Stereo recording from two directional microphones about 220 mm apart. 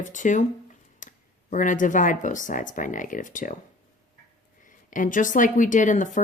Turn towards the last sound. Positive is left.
turn(degrees=35)  # may be behind; listen again after turning